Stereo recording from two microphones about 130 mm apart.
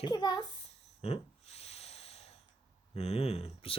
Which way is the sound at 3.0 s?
50° left (ahead or behind).